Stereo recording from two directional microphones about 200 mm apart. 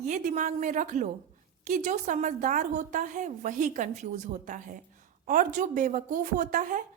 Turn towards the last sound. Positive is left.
turn(degrees=-40)  # may be behind; listen again after turning